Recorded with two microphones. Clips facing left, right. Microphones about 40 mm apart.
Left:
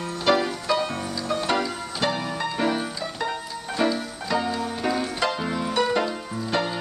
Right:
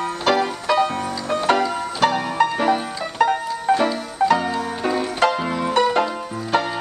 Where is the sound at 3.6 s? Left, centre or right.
Right.